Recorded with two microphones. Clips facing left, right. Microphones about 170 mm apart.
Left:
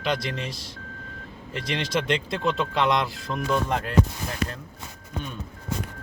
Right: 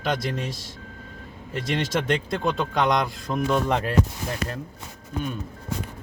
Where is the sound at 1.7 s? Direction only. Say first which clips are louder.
Right 1 dB; 45° right (ahead or behind).